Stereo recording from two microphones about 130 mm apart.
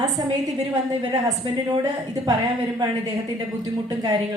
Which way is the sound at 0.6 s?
30° right (ahead or behind).